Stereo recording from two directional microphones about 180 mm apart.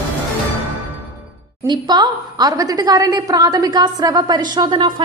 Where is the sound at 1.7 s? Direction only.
25° right (ahead or behind).